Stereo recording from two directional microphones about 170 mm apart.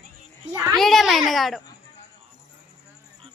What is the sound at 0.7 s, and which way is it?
Speech, centre (ahead or behind).